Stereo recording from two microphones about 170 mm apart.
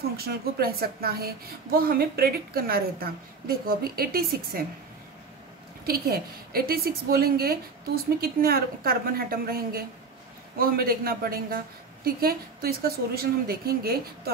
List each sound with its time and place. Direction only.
0.2 s a woman's voice: 65° right (ahead or behind)
5.9 s a woman's voice: 60° right (ahead or behind)